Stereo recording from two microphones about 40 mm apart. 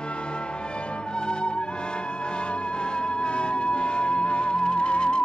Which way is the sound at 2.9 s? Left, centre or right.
Left.